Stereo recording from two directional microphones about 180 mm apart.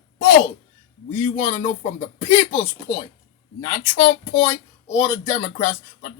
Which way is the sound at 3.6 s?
30° left (ahead or behind).